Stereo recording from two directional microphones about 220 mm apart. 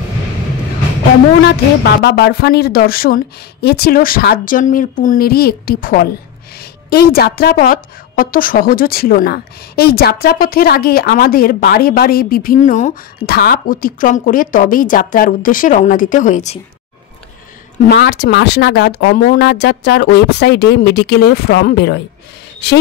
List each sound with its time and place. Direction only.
1.4 s a woman's voice: 50° left (ahead or behind)
17.8 s speech: 50° left (ahead or behind)